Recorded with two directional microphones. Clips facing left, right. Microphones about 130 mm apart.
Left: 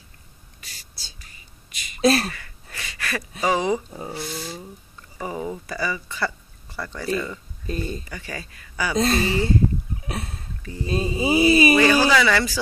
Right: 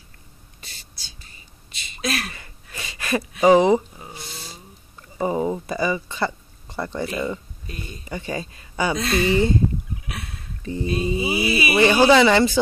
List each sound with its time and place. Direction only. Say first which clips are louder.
0.6 s a sound: even; 25° right (ahead or behind)
2.0 s speech: left 8 dB; 35° left (ahead or behind)
2.3 s a sound: right 1 dB; 25° right (ahead or behind)
5.1 s speech: right 7 dB; 25° right (ahead or behind)
7.6 s mantra: left 8 dB; 35° left (ahead or behind)
8.0 s speech: right 6 dB; 20° right (ahead or behind)
8.9 s mantra: left 1 dB; 35° left (ahead or behind)
9.9 s a sound: left 4 dB; 35° left (ahead or behind)
10.6 s mantra: right 6 dB; 25° right (ahead or behind)
10.9 s mantra: left 2 dB; 30° left (ahead or behind)
11.8 s speech: right 3 dB; 25° right (ahead or behind)